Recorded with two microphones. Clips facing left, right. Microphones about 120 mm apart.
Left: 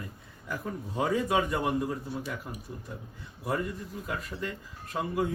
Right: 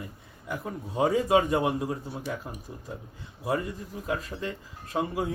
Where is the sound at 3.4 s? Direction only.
30° right (ahead or behind).